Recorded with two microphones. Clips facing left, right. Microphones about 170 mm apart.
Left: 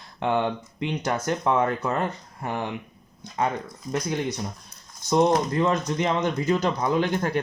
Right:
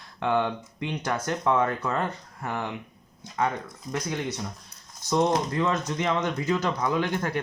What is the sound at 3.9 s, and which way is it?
Speech, 20° left (ahead or behind).